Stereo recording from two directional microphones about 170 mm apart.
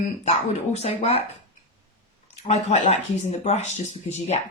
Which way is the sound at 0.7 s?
40° left (ahead or behind).